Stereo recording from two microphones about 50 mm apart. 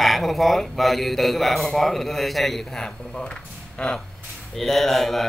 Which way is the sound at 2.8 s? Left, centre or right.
Centre.